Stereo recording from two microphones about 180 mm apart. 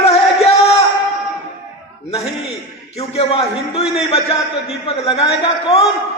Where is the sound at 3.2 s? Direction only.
35° left (ahead or behind).